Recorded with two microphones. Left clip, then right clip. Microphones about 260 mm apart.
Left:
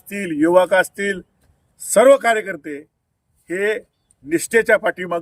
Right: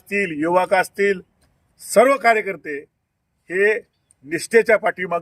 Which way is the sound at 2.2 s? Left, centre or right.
Centre.